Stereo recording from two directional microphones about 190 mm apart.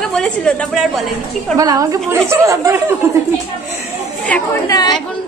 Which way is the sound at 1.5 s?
20° right (ahead or behind).